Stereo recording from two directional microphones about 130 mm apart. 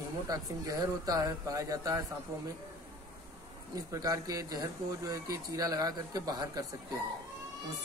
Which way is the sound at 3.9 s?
25° right (ahead or behind).